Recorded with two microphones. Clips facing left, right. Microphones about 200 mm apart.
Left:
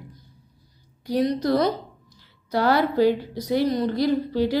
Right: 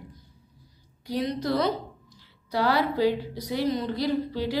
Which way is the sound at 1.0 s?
45° left (ahead or behind).